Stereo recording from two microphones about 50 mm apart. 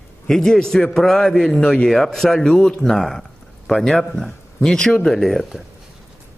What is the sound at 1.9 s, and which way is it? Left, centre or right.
A man's voice, centre.